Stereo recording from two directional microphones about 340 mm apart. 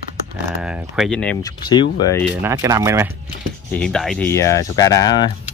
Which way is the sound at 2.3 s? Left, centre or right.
Centre.